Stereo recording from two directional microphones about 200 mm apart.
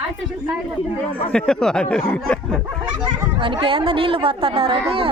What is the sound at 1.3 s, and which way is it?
Speech, 5° left (ahead or behind).